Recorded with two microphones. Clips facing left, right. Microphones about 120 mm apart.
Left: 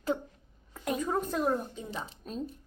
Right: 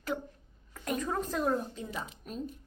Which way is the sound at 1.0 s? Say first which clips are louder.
Left 2 dB; 10° left (ahead or behind).